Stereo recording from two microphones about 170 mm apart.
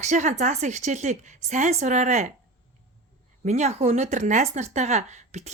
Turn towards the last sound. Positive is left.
turn(degrees=-45)  # may be behind; listen again after turning